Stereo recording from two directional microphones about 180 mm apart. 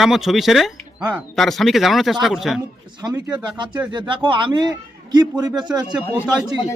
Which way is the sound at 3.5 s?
25° right (ahead or behind).